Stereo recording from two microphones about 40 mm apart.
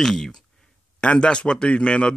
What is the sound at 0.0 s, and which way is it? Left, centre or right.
Speech, centre.